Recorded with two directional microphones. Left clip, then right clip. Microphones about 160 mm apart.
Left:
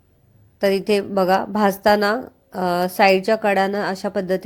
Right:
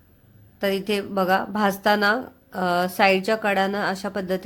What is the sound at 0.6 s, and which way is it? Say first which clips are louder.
A woman's voice: left 6 dB; 30° left (ahead or behind).